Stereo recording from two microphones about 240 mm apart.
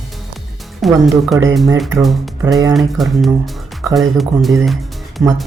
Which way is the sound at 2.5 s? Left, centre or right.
Centre.